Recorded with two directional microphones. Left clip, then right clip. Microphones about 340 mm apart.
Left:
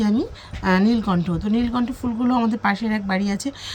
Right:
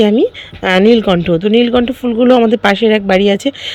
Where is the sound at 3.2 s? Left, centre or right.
Centre.